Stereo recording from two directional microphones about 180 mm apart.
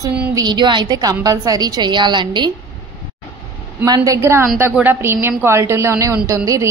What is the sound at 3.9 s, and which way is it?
A woman's voice, 15° right (ahead or behind).